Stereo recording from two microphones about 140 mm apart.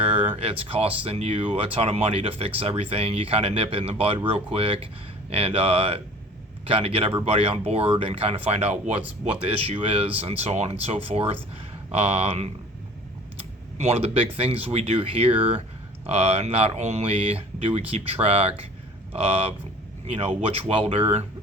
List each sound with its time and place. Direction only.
0.0 s a sound: 45° right (ahead or behind)
0.6 s speech: 45° right (ahead or behind)
13.7 s speech: 50° right (ahead or behind)